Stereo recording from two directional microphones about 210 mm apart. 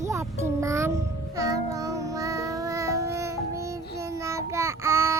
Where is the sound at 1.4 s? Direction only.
15° right (ahead or behind).